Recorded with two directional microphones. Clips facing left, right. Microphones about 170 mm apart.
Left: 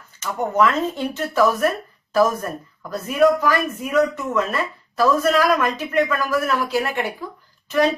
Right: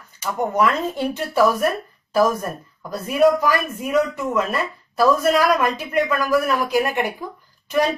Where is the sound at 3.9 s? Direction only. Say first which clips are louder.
Even; 10° right (ahead or behind).